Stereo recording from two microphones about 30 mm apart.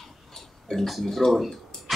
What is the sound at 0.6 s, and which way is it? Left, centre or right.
Speech, centre.